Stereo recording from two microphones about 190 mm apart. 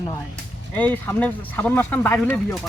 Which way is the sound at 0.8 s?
10° left (ahead or behind).